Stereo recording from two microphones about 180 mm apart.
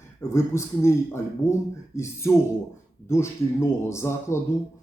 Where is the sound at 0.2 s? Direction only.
15° left (ahead or behind).